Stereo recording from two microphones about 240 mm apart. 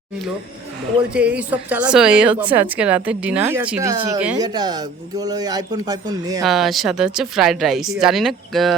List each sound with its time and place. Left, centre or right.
1.1 s a man's voice: centre
6.4 s speech: centre